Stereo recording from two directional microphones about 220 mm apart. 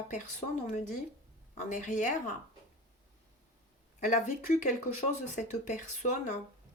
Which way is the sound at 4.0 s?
35° left (ahead or behind).